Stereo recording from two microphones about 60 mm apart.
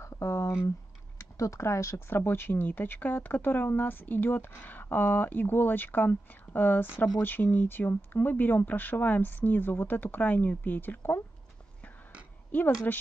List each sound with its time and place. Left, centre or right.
0.0 s a sound: left
1.1 s speech: left
2.0 s speech: left
12.4 s speech: left